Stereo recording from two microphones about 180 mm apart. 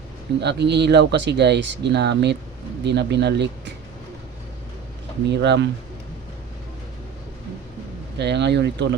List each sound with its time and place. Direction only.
0.3 s speech: 70° right (ahead or behind)
5.3 s speech: 75° right (ahead or behind)
8.2 s speech: 70° right (ahead or behind)